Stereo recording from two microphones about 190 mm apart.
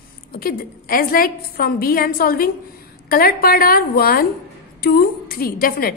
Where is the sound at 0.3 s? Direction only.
50° left (ahead or behind).